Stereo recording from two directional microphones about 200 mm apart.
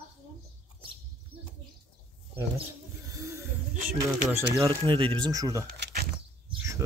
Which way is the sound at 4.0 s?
10° right (ahead or behind).